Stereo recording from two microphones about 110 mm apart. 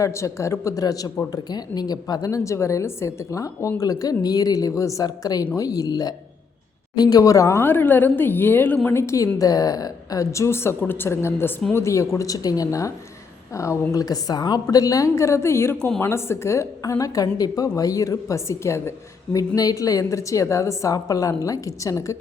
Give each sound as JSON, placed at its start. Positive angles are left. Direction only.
{"t": 0.0, "sound": "a woman's voice", "side_deg": 25}